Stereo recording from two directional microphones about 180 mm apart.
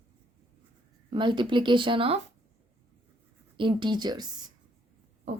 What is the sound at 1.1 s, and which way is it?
Speech, 25° right (ahead or behind).